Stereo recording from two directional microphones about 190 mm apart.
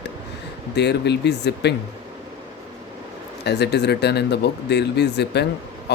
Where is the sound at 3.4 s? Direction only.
60° left (ahead or behind).